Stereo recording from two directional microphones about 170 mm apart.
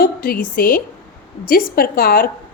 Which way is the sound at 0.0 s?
60° left (ahead or behind).